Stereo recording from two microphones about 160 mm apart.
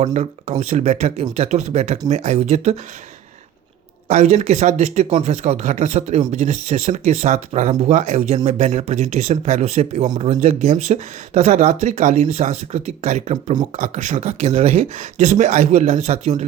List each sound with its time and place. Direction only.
0.0 s speech: 45° right (ahead or behind)
4.1 s speech: 45° right (ahead or behind)